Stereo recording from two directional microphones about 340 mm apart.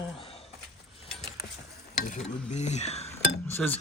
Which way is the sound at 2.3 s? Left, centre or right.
Centre.